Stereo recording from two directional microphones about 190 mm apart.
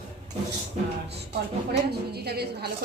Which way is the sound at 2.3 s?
55° right (ahead or behind).